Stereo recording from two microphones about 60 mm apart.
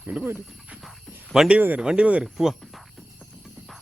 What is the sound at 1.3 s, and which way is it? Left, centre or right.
Speech, centre.